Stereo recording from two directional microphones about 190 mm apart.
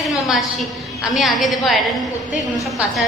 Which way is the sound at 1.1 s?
Centre (ahead or behind).